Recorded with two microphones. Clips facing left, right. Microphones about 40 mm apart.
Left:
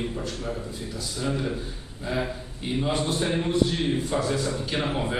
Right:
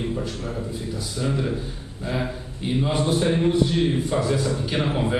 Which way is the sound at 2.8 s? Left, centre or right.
Centre.